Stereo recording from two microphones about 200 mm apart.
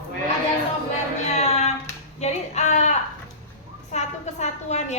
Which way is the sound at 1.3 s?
35° left (ahead or behind).